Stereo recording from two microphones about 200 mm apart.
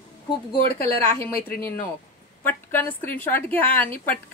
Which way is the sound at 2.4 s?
10° left (ahead or behind).